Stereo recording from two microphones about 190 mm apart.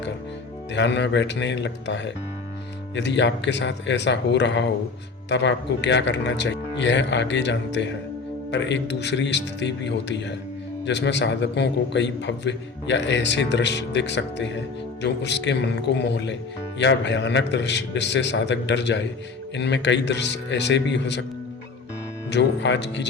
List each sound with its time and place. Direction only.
0.7 s a man's voice: 65° left (ahead or behind)
22.3 s a man's voice: 70° left (ahead or behind)